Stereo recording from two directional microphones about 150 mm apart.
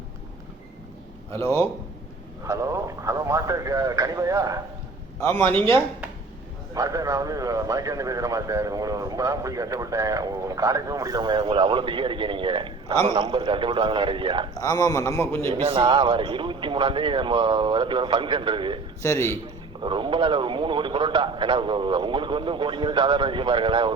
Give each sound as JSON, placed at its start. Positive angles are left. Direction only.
{"t": 1.3, "sound": "a man's voice", "side_deg": 20}
{"t": 2.5, "sound": "speech", "side_deg": -20}
{"t": 6.7, "sound": "speech", "side_deg": -20}
{"t": 14.6, "sound": "a man's voice", "side_deg": 25}
{"t": 15.4, "sound": "speech", "side_deg": -40}
{"t": 19.0, "sound": "a man's voice", "side_deg": 20}
{"t": 19.8, "sound": "speech", "side_deg": -35}